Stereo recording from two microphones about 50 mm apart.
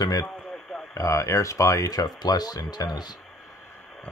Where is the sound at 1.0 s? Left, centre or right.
Left.